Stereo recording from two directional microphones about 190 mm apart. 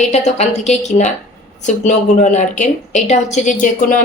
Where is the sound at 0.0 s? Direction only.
35° left (ahead or behind).